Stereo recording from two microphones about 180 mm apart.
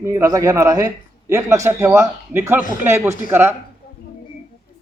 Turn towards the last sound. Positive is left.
turn(degrees=-10)  # may be behind; listen again after turning